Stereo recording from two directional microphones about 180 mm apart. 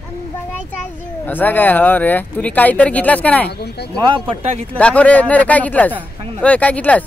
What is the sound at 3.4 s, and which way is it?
Speech, 65° left (ahead or behind).